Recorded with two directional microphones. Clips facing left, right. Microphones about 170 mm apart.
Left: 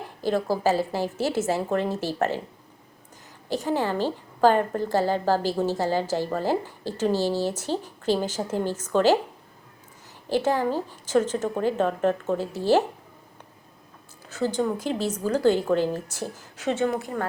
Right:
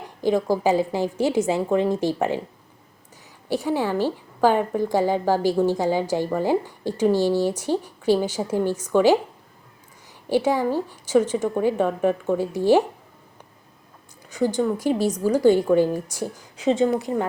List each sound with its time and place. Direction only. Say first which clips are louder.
0.2 s a woman's voice: right 4 dB; 15° right (ahead or behind)
3.5 s a woman's voice: right 2 dB; 10° right (ahead or behind)
10.2 s a woman's voice: right 3 dB; 10° right (ahead or behind)
14.3 s a woman's voice: right 3 dB; 15° right (ahead or behind)